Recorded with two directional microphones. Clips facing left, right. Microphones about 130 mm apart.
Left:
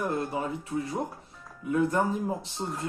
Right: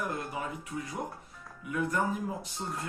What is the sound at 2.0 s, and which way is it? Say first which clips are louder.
Speech: left 4 dB; 30° left (ahead or behind).